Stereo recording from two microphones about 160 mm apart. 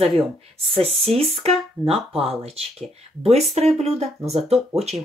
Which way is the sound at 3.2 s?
40° right (ahead or behind).